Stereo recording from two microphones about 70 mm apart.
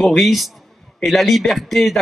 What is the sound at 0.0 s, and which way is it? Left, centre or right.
Speech, centre.